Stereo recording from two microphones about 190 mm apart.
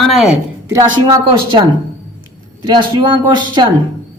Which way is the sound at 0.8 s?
25° right (ahead or behind).